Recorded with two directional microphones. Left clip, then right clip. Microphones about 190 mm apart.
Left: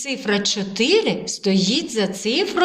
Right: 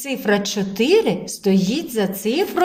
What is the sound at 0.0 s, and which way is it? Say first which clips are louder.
A woman's voice: right 1 dB; 45° right (ahead or behind).